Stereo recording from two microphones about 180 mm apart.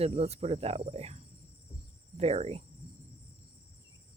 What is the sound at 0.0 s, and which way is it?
Speech, 35° right (ahead or behind).